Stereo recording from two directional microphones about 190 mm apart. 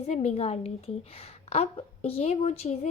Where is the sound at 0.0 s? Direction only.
35° left (ahead or behind).